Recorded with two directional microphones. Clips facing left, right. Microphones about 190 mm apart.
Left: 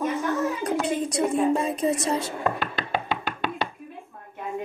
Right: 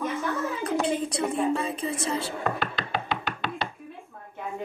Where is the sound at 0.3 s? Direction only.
40° left (ahead or behind).